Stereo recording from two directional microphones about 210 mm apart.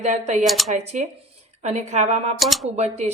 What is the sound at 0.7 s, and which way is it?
A woman's voice, 35° right (ahead or behind).